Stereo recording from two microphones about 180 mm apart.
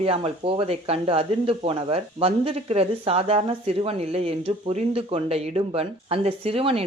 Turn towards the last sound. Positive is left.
turn(degrees=-30)  # may be behind; listen again after turning